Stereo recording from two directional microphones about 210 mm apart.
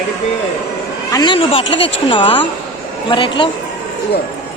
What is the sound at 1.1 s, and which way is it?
Speech, 20° left (ahead or behind).